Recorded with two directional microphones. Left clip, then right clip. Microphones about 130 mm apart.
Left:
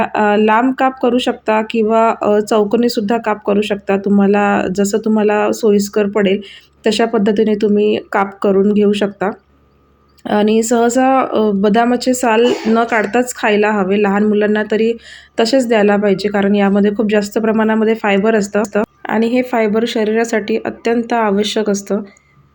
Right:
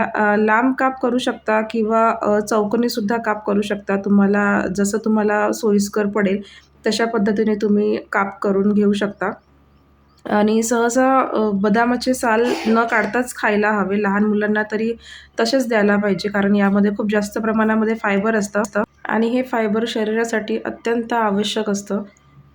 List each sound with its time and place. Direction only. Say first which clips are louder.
0.0 s speech: left 4 dB; 15° left (ahead or behind)